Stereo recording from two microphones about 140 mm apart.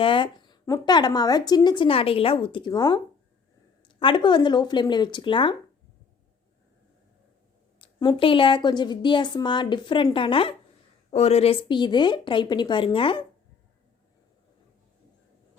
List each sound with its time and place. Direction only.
0.0 s a woman's voice: 35° left (ahead or behind)
7.8 s a woman's voice: 35° left (ahead or behind)
11.7 s a woman's voice: 35° left (ahead or behind)